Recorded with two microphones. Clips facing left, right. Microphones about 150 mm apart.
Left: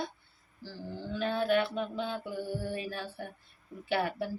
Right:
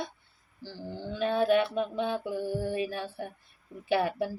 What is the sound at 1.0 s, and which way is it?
Speech, 20° right (ahead or behind).